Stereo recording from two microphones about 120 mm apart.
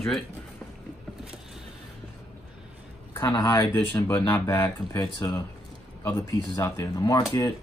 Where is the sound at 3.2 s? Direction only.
25° left (ahead or behind).